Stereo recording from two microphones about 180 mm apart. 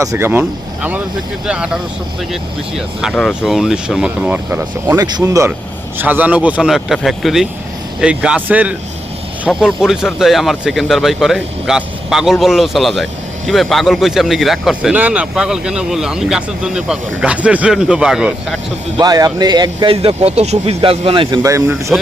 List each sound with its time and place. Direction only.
0.0 s speech: 15° right (ahead or behind)
18.9 s speech: 20° right (ahead or behind)
21.4 s speech: 15° right (ahead or behind)